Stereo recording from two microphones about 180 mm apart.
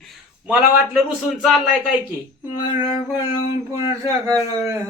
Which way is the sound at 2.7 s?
15° right (ahead or behind).